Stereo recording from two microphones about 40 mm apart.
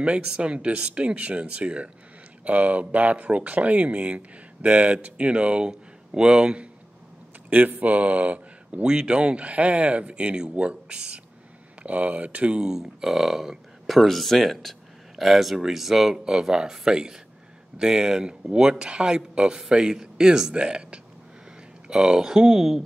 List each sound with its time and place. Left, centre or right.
0.0 s speech: right
2.4 s speech: right
5.7 s speech: centre
7.4 s speech: right
8.8 s speech: right; by 22.8 s centre